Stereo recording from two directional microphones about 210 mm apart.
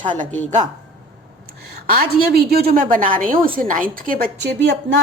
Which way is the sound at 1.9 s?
45° right (ahead or behind).